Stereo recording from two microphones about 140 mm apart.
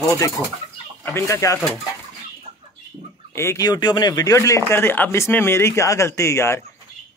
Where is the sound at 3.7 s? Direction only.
30° left (ahead or behind).